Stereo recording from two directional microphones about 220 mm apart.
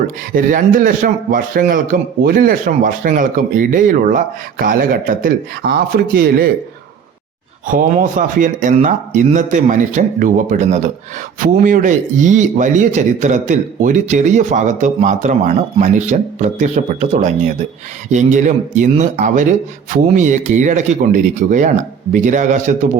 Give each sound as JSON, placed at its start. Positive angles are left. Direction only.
{"t": 0.3, "sound": "a man's voice", "side_deg": -40}
{"t": 7.7, "sound": "a man's voice", "side_deg": -35}